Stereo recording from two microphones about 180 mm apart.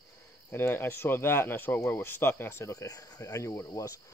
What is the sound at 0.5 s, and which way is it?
Speech, 10° left (ahead or behind).